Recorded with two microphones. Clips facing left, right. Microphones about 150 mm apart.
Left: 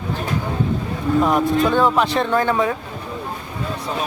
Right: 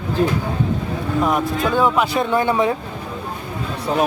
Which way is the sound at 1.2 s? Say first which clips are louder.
Left 1 dB; centre (ahead or behind).